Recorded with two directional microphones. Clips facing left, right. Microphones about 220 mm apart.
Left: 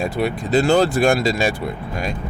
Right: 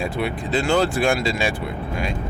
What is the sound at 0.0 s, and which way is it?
Speech, 40° left (ahead or behind).